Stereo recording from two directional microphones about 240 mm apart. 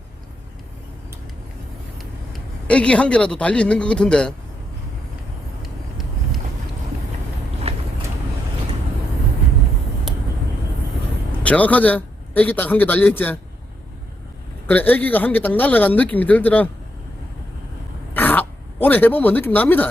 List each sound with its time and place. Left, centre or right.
2.0 s a man's voice: centre
5.6 s vehicle: centre
7.7 s vehicle: right
11.4 s speech: centre
14.7 s speech: centre
18.1 s throat clearing: centre